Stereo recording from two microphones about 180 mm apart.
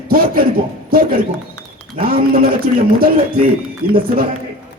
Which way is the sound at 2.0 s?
55° right (ahead or behind).